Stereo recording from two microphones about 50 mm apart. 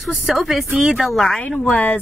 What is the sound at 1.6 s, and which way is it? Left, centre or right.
Speech, left.